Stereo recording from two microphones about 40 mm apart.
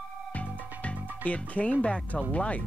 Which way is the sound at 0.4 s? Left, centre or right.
Left.